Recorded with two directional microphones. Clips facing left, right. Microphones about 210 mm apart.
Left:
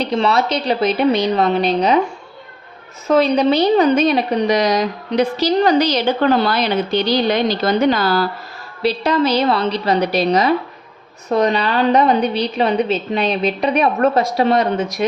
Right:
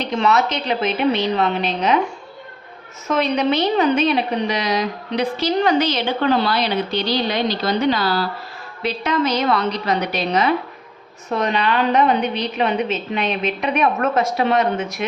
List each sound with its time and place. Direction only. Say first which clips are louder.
0.0 s a woman's voice: left 2 dB; 35° left (ahead or behind)
3.1 s a woman's voice: left 5 dB; 35° left (ahead or behind)
8.8 s a woman's voice: left 4 dB; 35° left (ahead or behind)